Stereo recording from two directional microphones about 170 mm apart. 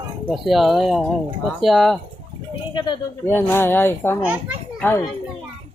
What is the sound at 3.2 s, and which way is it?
Speech, 10° left (ahead or behind).